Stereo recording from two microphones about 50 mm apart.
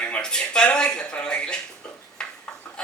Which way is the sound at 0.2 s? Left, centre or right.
Centre.